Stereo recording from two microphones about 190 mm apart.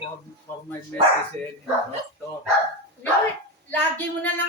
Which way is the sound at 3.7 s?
10° left (ahead or behind).